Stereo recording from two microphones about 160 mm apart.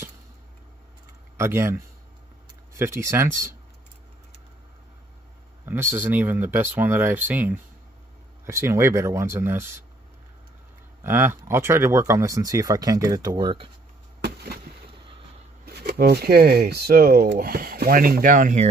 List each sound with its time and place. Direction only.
1.3 s speech: 15° right (ahead or behind)
2.8 s speech: 15° right (ahead or behind)
5.7 s speech: 15° right (ahead or behind)
11.0 s speech: 15° right (ahead or behind); by 13.7 s 30° right (ahead or behind)
14.2 s a sound: 85° right
15.6 s speech: 85° right; by 18.7 s 55° right (ahead or behind)